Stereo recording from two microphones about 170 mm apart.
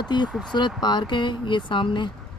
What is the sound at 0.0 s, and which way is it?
Speech, 25° left (ahead or behind).